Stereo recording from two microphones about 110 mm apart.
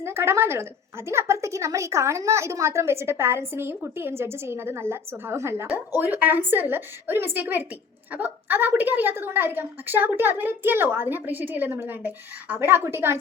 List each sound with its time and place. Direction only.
0.0 s a woman's voice: 25° right (ahead or behind)